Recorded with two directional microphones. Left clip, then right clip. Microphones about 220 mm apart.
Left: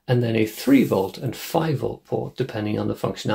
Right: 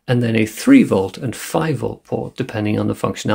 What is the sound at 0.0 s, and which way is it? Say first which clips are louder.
Speech: right 3 dB; 30° right (ahead or behind).